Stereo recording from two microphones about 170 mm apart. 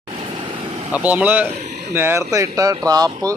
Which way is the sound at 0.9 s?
10° right (ahead or behind).